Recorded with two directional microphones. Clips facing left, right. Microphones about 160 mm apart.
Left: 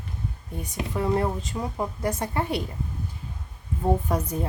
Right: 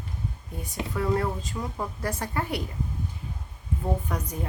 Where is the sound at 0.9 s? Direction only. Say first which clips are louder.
Left 2 dB; 25° left (ahead or behind).